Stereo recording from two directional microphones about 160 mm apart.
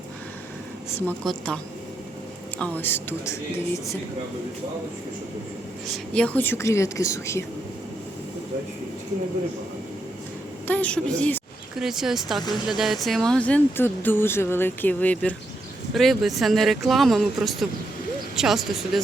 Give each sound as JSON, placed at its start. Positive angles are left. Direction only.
{"t": 1.0, "sound": "speech", "side_deg": 5}
{"t": 2.6, "sound": "speech", "side_deg": 10}
{"t": 6.1, "sound": "speech", "side_deg": 10}
{"t": 10.7, "sound": "speech", "side_deg": 10}